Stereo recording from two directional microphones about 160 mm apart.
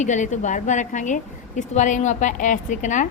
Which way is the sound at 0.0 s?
50° left (ahead or behind).